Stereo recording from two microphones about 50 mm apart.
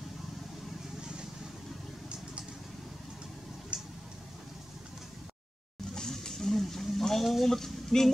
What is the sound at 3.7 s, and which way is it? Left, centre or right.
Vehicle, right.